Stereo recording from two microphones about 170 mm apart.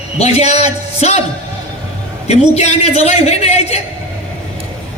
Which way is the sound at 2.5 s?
40° left (ahead or behind).